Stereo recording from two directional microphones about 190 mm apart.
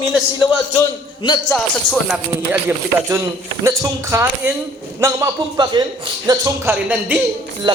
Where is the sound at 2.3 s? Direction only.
10° right (ahead or behind).